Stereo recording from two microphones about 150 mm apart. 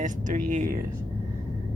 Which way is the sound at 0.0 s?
55° right (ahead or behind).